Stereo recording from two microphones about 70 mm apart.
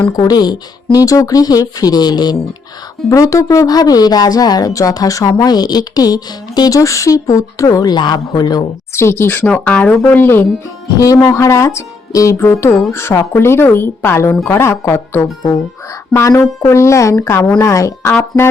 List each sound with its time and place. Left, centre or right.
0.2 s speech: left
3.1 s speech: left
4.7 s speech: left
5.3 s speech: left
9.0 s a woman's voice: left
9.5 s speech: centre
10.2 s a woman's voice: left
10.9 s a woman's voice: left
16.4 s speech: left